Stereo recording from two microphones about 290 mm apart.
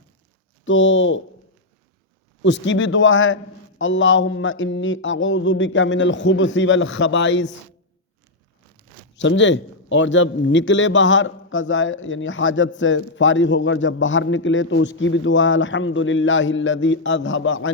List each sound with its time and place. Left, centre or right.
0.6 s a man's voice: left
2.4 s a man's voice: left
9.1 s a man's voice: left